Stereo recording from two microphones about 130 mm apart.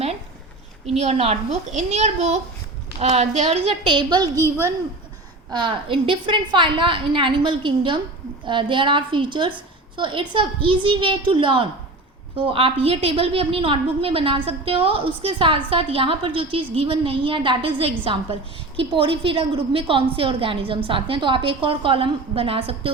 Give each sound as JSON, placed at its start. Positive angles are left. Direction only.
{"t": 0.9, "sound": "a child's voice", "side_deg": -55}
{"t": 5.5, "sound": "a woman's voice", "side_deg": -35}